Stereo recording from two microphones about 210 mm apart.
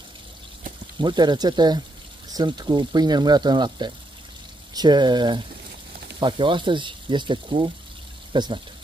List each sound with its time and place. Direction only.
0.9 s speech: 20° right (ahead or behind)